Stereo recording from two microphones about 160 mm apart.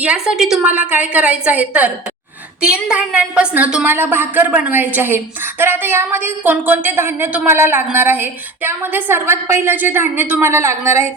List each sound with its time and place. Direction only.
0.0 s a woman's voice: 5° right (ahead or behind)